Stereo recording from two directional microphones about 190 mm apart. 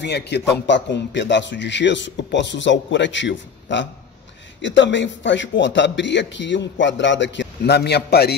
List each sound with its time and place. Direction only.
0.0 s a man's voice: 60° left (ahead or behind)